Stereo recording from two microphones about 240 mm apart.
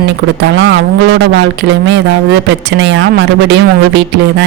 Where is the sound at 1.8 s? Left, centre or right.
Right.